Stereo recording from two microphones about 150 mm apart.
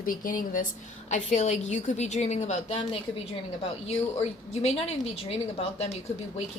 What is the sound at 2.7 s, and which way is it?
A woman's voice, 35° left (ahead or behind).